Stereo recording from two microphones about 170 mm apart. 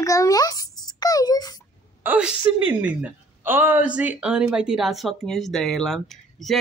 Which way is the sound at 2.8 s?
10° right (ahead or behind).